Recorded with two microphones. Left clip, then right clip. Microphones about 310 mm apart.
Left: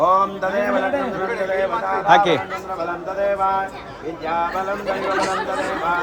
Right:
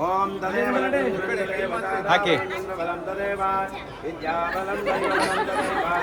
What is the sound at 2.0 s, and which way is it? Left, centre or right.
Speech, left.